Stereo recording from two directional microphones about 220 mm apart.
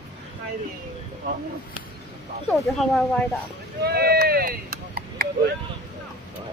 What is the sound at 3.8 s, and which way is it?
Speech, 45° right (ahead or behind).